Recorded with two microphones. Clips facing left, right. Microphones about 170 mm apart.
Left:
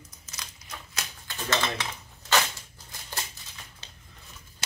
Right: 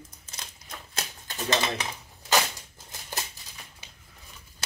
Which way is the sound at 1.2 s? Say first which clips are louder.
Right 1 dB; 15° right (ahead or behind).